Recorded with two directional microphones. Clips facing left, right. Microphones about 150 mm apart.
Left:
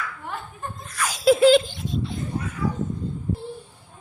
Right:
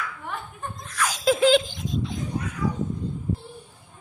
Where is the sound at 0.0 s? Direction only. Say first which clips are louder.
Left 1 dB; centre (ahead or behind).